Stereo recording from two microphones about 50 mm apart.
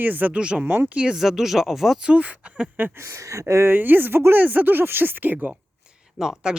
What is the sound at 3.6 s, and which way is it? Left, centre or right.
Speech, right.